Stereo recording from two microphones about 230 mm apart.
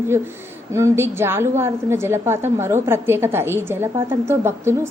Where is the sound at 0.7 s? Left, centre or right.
Centre.